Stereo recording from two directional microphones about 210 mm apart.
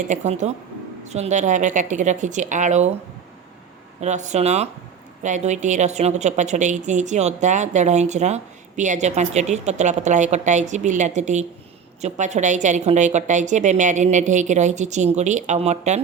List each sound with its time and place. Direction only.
0.1 s a woman's voice: 35° right (ahead or behind)
4.0 s a woman's voice: 35° right (ahead or behind)